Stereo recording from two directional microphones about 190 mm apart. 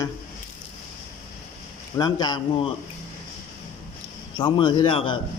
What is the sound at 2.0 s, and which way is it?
Speech, 20° left (ahead or behind).